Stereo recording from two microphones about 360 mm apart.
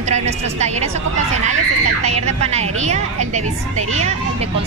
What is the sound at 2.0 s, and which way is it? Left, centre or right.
A woman's voice, centre.